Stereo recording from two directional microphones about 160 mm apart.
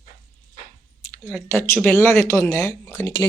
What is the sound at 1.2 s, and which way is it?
Speech, 15° left (ahead or behind).